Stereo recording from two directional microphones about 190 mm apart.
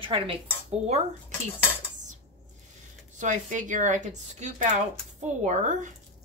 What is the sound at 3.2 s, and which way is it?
A woman's voice, 40° right (ahead or behind).